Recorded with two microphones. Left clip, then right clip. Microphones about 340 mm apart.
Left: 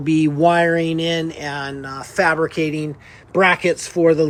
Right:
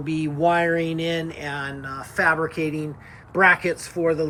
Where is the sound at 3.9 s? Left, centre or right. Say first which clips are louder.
Left 8 dB; centre.